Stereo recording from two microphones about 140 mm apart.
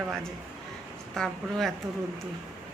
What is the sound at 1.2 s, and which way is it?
Speech, 5° left (ahead or behind).